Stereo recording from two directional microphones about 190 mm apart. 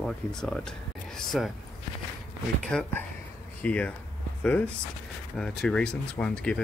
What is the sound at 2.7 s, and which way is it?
Speech, 5° left (ahead or behind).